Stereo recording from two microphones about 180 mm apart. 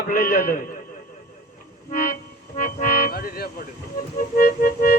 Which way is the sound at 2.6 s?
55° left (ahead or behind).